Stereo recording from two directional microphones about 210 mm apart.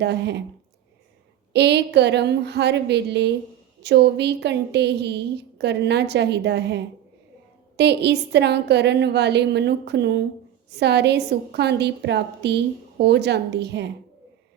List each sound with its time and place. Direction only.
0.0 s a woman's voice: 55° right (ahead or behind)
1.5 s a woman's voice: 55° right (ahead or behind)